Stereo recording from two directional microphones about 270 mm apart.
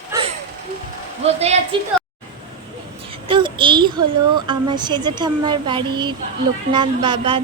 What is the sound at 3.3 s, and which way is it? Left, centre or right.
A child's voice, centre.